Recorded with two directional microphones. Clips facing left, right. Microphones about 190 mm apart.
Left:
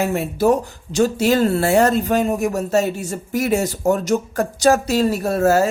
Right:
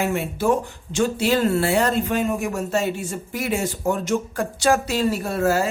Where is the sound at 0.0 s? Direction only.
40° left (ahead or behind).